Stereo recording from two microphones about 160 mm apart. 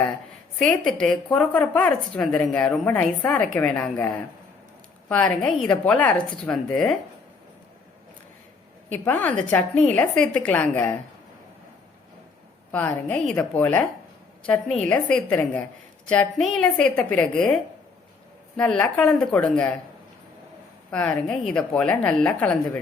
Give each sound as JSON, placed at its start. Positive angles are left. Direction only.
{"t": 0.6, "sound": "speech", "side_deg": 5}
{"t": 8.9, "sound": "speech", "side_deg": 10}
{"t": 12.7, "sound": "a woman's voice", "side_deg": 10}
{"t": 20.9, "sound": "speech", "side_deg": 5}